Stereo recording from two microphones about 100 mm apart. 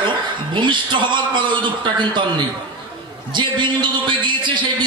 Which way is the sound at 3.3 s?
50° right (ahead or behind).